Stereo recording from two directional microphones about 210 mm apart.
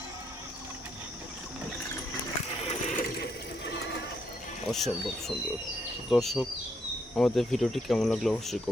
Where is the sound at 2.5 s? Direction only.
30° left (ahead or behind); by 4.0 s 50° left (ahead or behind).